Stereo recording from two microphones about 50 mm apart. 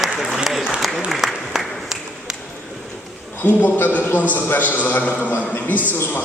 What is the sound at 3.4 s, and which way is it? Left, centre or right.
A man's voice, left.